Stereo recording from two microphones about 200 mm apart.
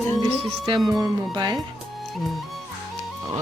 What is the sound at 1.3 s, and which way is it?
Speech, 20° right (ahead or behind).